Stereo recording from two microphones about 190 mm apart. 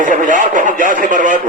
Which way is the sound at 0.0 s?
45° right (ahead or behind).